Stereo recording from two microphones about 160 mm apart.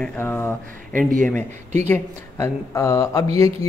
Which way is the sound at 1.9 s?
15° left (ahead or behind).